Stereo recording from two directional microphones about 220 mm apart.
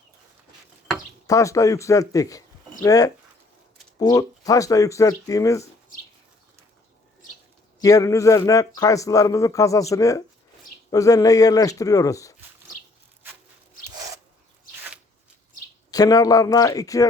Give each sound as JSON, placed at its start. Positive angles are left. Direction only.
{"t": 1.3, "sound": "a man's voice", "side_deg": 15}
{"t": 7.8, "sound": "a man's voice", "side_deg": 15}
{"t": 15.9, "sound": "a man's voice", "side_deg": 15}